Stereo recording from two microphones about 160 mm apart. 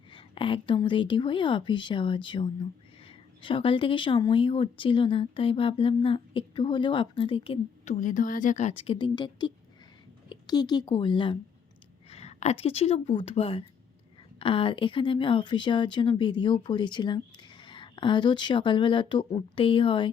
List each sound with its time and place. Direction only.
0.1 s a woman's voice: 35° left (ahead or behind)
8.0 s a woman's voice: 55° left (ahead or behind); by 11.3 s 30° left (ahead or behind)
12.1 s a woman's voice: 40° left (ahead or behind)